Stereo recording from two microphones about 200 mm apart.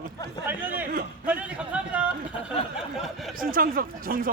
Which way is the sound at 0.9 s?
45° right (ahead or behind).